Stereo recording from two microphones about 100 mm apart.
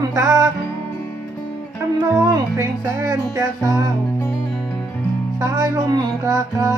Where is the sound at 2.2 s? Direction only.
40° right (ahead or behind).